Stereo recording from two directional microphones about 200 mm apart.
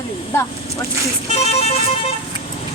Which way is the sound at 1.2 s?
30° left (ahead or behind).